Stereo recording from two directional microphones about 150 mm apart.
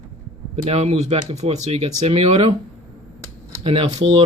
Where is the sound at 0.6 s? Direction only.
45° right (ahead or behind).